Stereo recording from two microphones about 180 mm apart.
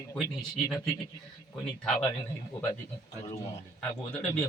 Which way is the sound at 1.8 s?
5° left (ahead or behind).